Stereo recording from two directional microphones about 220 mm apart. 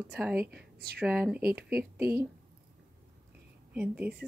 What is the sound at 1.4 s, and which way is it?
Speech, 45° right (ahead or behind).